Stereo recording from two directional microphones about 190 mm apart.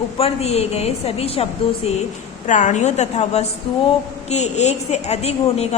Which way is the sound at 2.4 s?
40° left (ahead or behind).